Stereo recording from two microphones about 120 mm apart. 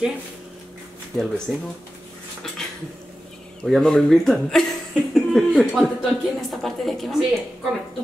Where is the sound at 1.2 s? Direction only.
Centre (ahead or behind).